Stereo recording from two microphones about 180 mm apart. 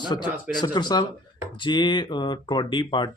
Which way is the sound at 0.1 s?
20° left (ahead or behind).